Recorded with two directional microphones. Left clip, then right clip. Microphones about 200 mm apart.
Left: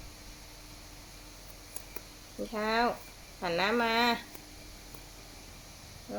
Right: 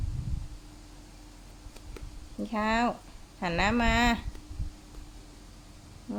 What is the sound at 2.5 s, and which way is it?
A woman's voice, 40° right (ahead or behind).